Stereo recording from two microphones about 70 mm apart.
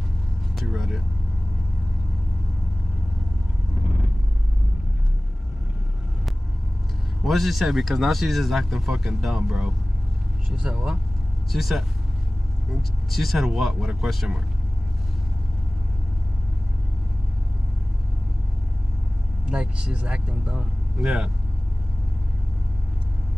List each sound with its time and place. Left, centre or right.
0.7 s speech: centre
7.2 s speech: centre
13.1 s speech: centre
19.5 s speech: centre